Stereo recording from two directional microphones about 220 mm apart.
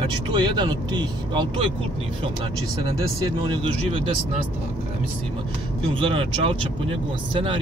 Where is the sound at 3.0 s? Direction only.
15° right (ahead or behind).